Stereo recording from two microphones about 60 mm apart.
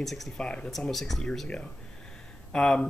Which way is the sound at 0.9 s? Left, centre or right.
Centre.